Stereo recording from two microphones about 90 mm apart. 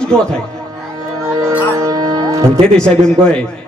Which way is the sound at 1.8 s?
40° right (ahead or behind).